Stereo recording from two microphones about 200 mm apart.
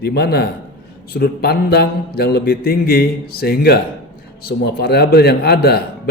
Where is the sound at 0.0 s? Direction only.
55° left (ahead or behind).